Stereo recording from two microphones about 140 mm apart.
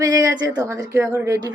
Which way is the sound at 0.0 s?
25° right (ahead or behind).